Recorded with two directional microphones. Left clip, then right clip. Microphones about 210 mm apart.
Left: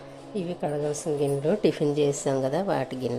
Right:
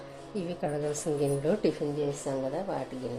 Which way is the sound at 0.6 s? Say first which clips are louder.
Left 3 dB; 10° left (ahead or behind).